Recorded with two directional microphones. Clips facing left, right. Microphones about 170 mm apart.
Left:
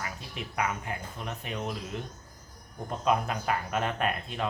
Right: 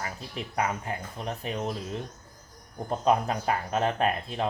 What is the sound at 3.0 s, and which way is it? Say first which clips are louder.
Speech: right 3 dB; 35° right (ahead or behind).